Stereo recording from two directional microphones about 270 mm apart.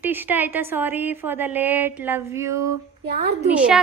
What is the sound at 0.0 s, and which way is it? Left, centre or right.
A woman's voice, centre.